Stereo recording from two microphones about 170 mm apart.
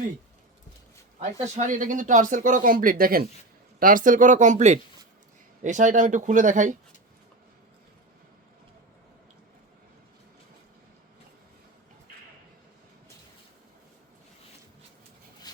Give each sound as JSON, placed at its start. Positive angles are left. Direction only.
{"t": 1.2, "sound": "speech", "side_deg": -45}
{"t": 15.5, "sound": "wood", "side_deg": 25}